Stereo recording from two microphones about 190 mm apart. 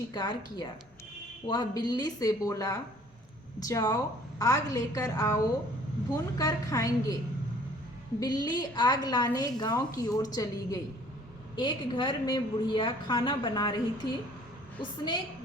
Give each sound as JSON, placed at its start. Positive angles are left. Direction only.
{"t": 0.1, "sound": "a woman's voice", "side_deg": 20}
{"t": 8.2, "sound": "a woman's voice", "side_deg": 20}